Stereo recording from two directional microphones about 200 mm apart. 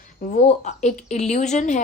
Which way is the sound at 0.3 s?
35° left (ahead or behind).